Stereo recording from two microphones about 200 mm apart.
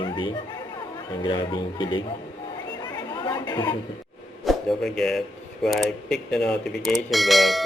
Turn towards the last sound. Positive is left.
turn(degrees=0)  # may be behind; listen again after turning